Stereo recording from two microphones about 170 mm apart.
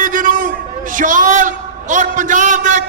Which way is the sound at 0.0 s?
50° right (ahead or behind).